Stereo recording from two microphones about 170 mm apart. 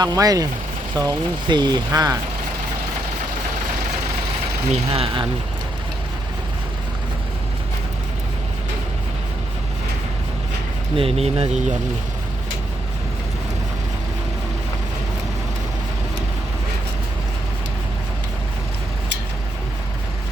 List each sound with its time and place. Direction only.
0.0 s speech: 20° right (ahead or behind)
4.7 s speech: 35° right (ahead or behind)
10.9 s speech: 35° right (ahead or behind)